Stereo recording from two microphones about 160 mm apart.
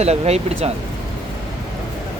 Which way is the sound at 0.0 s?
40° right (ahead or behind).